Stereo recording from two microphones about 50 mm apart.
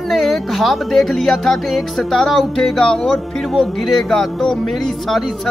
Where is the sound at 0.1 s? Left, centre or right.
Centre.